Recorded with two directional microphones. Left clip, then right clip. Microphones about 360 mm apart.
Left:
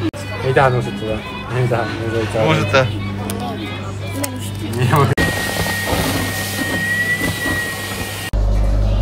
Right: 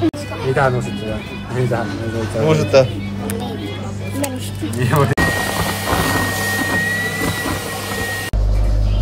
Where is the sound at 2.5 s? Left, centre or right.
Centre.